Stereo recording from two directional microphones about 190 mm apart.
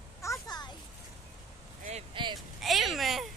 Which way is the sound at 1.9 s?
30° right (ahead or behind).